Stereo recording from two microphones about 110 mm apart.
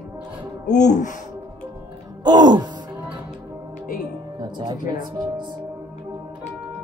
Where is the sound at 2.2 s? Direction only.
40° right (ahead or behind).